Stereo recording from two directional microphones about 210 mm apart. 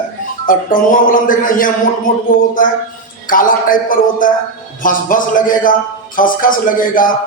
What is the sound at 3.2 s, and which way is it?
A man's voice, 40° left (ahead or behind).